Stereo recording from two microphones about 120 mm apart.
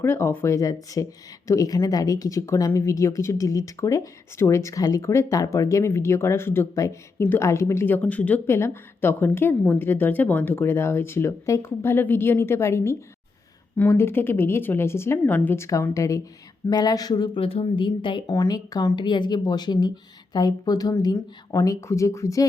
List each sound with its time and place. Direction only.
0.0 s speech: 20° left (ahead or behind)
17.4 s speech: 50° left (ahead or behind)
18.3 s speech: 30° left (ahead or behind)